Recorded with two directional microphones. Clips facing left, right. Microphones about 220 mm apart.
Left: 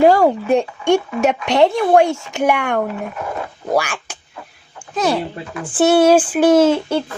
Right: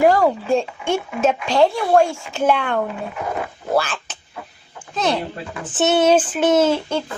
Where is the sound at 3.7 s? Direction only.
15° left (ahead or behind).